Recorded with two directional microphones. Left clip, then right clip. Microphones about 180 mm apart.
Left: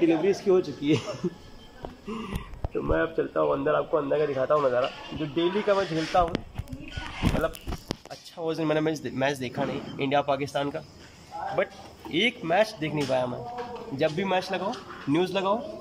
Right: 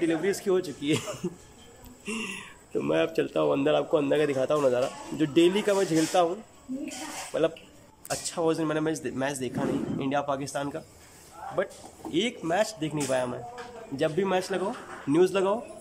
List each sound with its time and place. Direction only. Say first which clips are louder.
0.0 s speech: left 4 dB; centre (ahead or behind)
2.0 s a sound: right 4 dB; 10° right (ahead or behind)
2.7 s a man's voice: right 1 dB; 20° right (ahead or behind)
8.1 s a man's voice: right 6 dB; 5° right (ahead or behind)